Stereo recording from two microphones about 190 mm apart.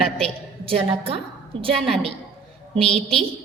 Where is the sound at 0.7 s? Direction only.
30° right (ahead or behind).